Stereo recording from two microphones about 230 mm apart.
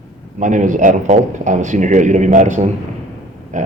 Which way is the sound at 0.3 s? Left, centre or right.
Right.